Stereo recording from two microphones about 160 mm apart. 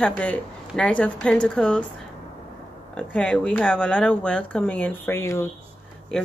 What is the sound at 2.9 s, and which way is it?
Speech, 5° left (ahead or behind).